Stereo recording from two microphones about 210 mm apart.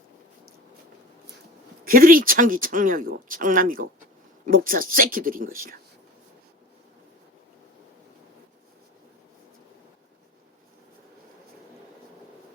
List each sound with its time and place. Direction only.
1.8 s speech: 45° right (ahead or behind)